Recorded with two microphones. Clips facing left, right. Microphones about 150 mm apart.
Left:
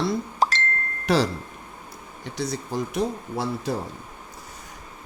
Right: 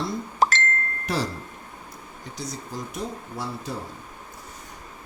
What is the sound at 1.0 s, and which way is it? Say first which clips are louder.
Speech: left 7 dB; 85° left.